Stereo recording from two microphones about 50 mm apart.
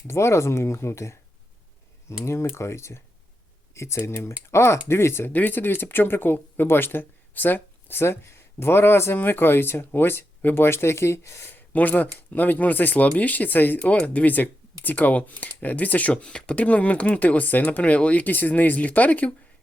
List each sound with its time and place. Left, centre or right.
0.1 s speech: left
2.2 s speech: left
5.3 s speech: left
9.1 s speech: left
11.5 s speech: left
13.9 s speech: left